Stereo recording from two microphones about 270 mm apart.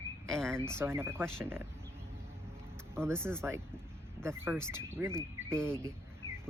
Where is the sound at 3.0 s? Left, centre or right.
Centre.